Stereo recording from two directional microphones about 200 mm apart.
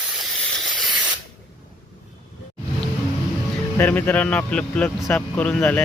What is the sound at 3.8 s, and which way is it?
A man's voice, 10° left (ahead or behind).